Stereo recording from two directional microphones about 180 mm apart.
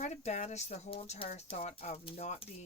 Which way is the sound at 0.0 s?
40° left (ahead or behind).